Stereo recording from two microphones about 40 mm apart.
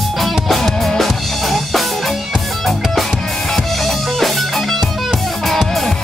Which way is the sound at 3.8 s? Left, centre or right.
Centre.